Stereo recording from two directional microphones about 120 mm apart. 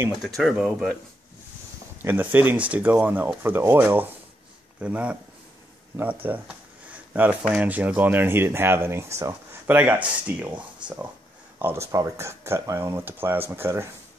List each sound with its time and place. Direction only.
0.4 s speech: centre (ahead or behind)
2.0 s speech: 15° right (ahead or behind)
6.2 s speech: 10° right (ahead or behind)
11.9 s speech: 25° right (ahead or behind)